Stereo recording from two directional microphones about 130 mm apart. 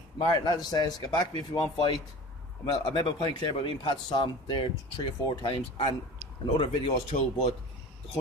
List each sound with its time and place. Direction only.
0.2 s a man's voice: 35° left (ahead or behind)